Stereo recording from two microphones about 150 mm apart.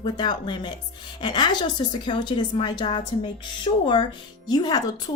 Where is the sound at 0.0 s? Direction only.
30° left (ahead or behind).